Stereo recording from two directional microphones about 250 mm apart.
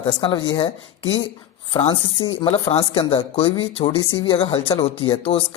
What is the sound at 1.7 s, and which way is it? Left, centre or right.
Speech, left.